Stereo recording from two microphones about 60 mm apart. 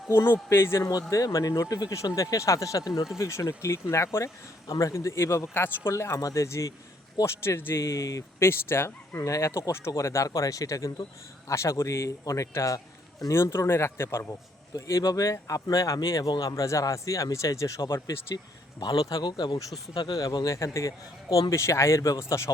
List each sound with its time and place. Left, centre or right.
0.1 s speech: left
0.8 s speech: left
1.1 s speech: left
3.2 s speech: left
7.3 s speech: left
8.4 s speech: left
9.1 s speech: left
11.4 s speech: left
13.3 s speech: left
18.9 s speech: left